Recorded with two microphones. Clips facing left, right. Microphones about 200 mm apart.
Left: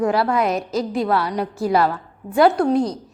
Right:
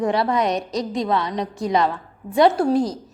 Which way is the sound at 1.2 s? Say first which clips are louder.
Left 2 dB; 20° right (ahead or behind).